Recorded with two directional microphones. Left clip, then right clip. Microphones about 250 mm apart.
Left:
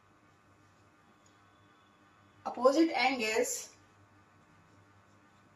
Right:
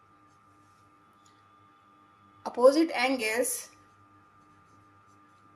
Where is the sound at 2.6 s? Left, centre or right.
Right.